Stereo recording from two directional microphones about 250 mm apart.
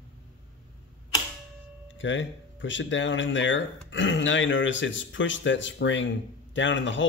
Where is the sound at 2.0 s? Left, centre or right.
Left.